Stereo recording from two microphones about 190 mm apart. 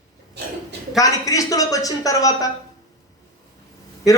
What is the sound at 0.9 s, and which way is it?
A woman's voice, 20° left (ahead or behind).